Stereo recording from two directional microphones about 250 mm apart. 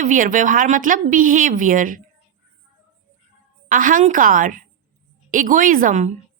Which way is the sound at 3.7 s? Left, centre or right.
Right.